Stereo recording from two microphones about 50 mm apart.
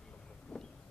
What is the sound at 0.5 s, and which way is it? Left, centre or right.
Wind, centre.